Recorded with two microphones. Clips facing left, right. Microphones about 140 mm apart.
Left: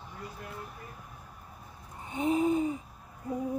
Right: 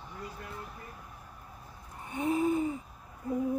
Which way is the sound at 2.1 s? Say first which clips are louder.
Left 2 dB; 20° left (ahead or behind).